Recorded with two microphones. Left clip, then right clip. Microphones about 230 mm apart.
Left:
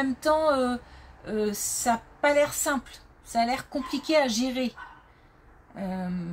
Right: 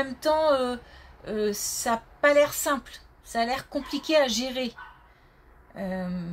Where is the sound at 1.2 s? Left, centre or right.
Right.